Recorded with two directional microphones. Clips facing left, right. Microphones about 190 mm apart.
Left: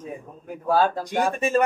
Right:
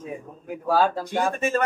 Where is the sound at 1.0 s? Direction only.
15° left (ahead or behind).